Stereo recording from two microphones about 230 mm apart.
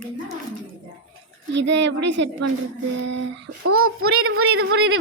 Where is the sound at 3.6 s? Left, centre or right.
Right.